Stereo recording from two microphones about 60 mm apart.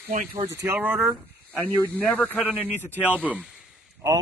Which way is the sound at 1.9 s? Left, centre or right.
Centre.